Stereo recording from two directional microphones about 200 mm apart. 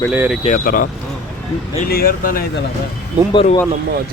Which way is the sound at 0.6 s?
45° left (ahead or behind).